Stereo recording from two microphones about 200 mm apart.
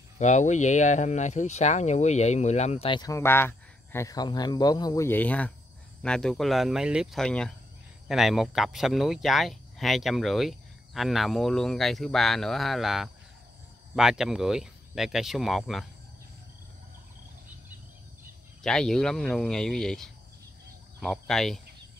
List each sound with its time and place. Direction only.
0.2 s speech: 35° left (ahead or behind); by 15.8 s centre (ahead or behind)
18.6 s speech: centre (ahead or behind)